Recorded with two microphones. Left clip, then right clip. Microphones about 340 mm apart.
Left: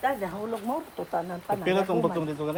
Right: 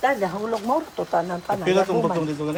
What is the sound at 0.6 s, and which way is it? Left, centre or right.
Speech, right.